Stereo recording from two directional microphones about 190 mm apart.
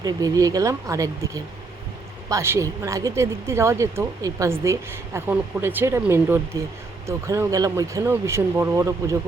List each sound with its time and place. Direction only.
0.0 s a woman's voice: 20° right (ahead or behind)